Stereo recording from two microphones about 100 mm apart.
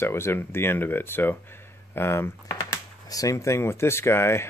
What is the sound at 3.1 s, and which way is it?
Speech, 35° left (ahead or behind).